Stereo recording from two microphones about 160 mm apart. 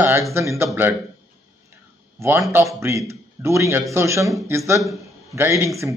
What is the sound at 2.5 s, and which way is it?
A man's voice, 15° right (ahead or behind).